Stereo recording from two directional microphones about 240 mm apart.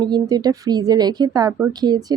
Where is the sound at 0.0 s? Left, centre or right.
Centre.